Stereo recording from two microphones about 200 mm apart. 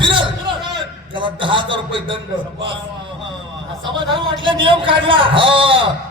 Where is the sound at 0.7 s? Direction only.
25° right (ahead or behind).